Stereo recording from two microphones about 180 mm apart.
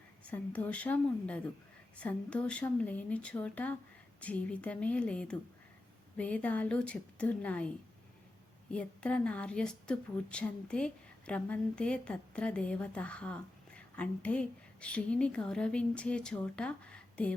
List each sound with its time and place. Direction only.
0.3 s speech: 5° left (ahead or behind)
8.7 s speech: 5° left (ahead or behind)